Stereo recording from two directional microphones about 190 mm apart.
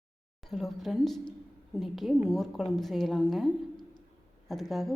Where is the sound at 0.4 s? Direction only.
Centre (ahead or behind).